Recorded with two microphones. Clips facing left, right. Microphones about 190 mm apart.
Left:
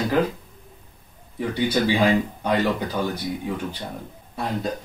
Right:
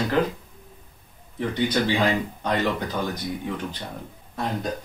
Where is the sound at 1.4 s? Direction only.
10° left (ahead or behind).